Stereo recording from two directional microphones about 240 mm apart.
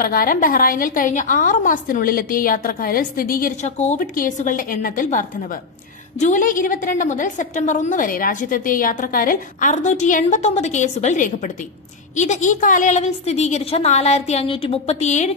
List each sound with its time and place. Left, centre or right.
0.0 s a woman's voice: left